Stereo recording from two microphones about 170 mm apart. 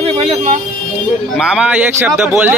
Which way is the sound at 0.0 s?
40° right (ahead or behind).